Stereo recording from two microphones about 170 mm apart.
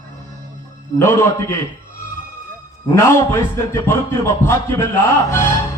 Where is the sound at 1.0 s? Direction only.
15° left (ahead or behind).